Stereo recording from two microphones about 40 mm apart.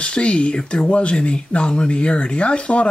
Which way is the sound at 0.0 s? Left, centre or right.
Left.